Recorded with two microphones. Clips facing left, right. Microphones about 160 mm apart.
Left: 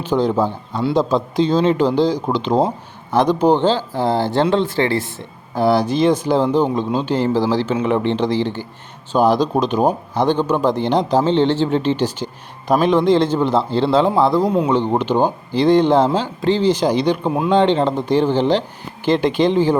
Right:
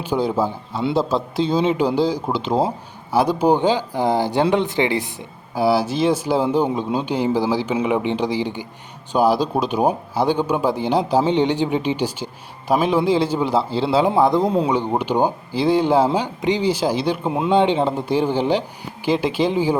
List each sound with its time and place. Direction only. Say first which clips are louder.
0.0 s a man's voice: left 3 dB; 10° right (ahead or behind)
5.5 s a man's voice: left 2 dB; 5° right (ahead or behind)
14.1 s a man's voice: left 1 dB; 20° right (ahead or behind)
14.7 s a man's voice: left 3 dB; 10° right (ahead or behind)